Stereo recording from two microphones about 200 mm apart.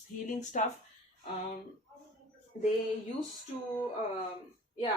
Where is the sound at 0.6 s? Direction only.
40° left (ahead or behind).